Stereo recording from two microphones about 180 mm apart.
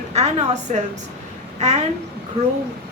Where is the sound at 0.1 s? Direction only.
35° right (ahead or behind).